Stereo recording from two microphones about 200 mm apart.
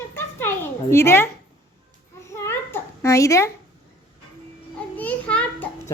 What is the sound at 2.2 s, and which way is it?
Babbling, 15° left (ahead or behind).